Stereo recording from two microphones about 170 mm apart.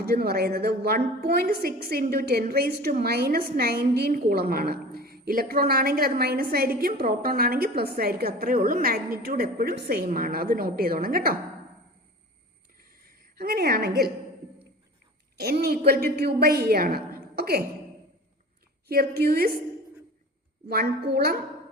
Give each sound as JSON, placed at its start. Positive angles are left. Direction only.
{"t": 0.0, "sound": "a woman's voice", "side_deg": -65}
{"t": 13.3, "sound": "a woman's voice", "side_deg": -65}
{"t": 15.4, "sound": "a woman's voice", "side_deg": -70}
{"t": 18.9, "sound": "a woman's voice", "side_deg": -65}
{"t": 20.7, "sound": "a woman's voice", "side_deg": -65}